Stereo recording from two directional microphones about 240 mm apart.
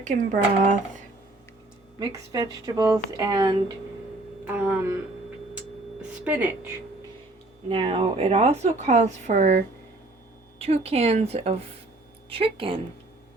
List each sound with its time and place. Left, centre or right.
0.0 s speech: right
2.0 s speech: centre
4.5 s speech: centre
6.2 s speech: centre
7.7 s speech: right